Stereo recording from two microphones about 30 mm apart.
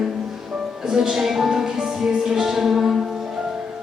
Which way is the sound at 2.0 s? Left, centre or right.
Right.